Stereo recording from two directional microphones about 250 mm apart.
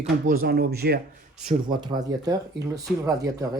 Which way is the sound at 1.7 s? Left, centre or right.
Centre.